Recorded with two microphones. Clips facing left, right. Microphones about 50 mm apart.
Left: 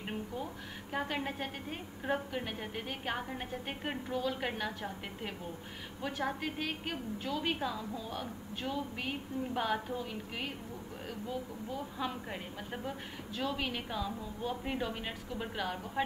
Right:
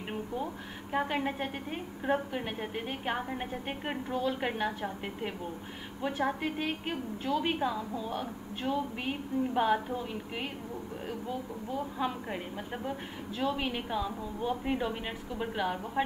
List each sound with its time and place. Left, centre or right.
0.9 s a woman's voice: centre
4.1 s a woman's voice: right
4.6 s a woman's voice: centre
9.0 s a woman's voice: centre
11.7 s a woman's voice: centre
14.6 s a woman's voice: centre